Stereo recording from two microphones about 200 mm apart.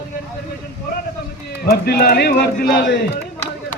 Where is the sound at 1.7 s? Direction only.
50° left (ahead or behind).